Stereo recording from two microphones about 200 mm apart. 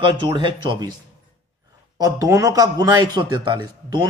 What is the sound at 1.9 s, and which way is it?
Speech, 20° right (ahead or behind).